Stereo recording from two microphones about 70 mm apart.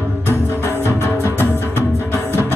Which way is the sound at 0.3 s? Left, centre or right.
Left.